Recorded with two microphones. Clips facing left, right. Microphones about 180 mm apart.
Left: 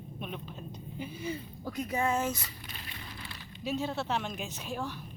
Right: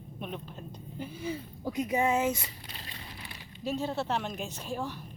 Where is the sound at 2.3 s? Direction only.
25° right (ahead or behind).